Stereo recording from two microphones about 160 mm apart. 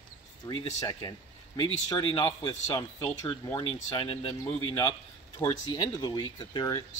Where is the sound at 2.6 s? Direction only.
20° left (ahead or behind).